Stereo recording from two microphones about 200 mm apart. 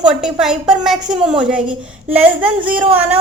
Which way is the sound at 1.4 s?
5° right (ahead or behind).